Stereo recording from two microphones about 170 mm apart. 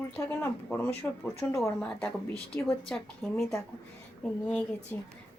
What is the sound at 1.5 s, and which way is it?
A woman's voice, 5° left (ahead or behind).